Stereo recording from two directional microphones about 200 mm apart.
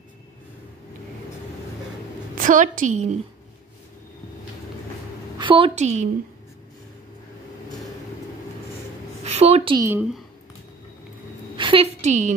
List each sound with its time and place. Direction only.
2.3 s a woman's voice: 40° right (ahead or behind)
5.4 s a woman's voice: 25° right (ahead or behind)
9.2 s a woman's voice: 30° right (ahead or behind)
9.8 s speech: 15° right (ahead or behind)
11.5 s a woman's voice: 25° right (ahead or behind)